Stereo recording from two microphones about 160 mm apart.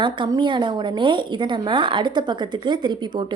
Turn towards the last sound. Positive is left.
turn(degrees=-30)  # may be behind; listen again after turning